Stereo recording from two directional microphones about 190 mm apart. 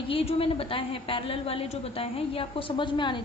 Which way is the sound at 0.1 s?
30° left (ahead or behind).